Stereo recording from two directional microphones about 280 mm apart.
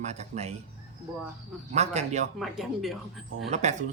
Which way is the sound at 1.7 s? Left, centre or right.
Right.